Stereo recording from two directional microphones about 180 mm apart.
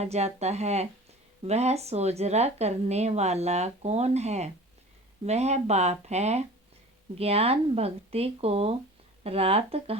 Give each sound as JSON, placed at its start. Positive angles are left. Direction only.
{"t": 0.0, "sound": "a woman's voice", "side_deg": -35}